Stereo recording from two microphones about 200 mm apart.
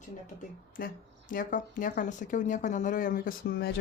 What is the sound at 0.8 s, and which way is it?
Speech, 45° left (ahead or behind).